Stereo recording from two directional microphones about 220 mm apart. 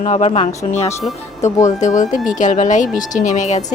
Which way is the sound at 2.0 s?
35° left (ahead or behind).